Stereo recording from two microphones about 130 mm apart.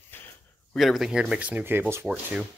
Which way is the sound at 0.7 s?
Centre (ahead or behind).